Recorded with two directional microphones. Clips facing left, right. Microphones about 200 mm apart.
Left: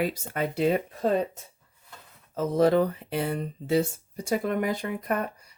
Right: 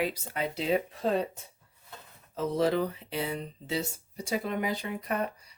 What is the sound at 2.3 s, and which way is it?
Speech, 45° left (ahead or behind).